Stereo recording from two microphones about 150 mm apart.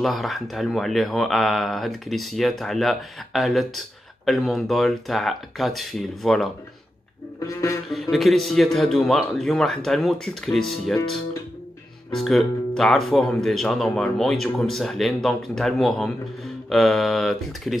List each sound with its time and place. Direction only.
0.0 s speech: centre (ahead or behind)
7.3 s a sound: 20° left (ahead or behind)
7.9 s speech: centre (ahead or behind)
12.1 s speech: centre (ahead or behind)